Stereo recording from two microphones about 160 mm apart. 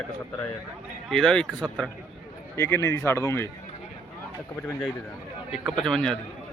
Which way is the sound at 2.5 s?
15° left (ahead or behind).